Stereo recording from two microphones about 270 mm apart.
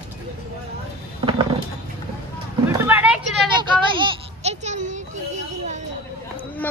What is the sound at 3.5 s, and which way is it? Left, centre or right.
A child's voice, centre.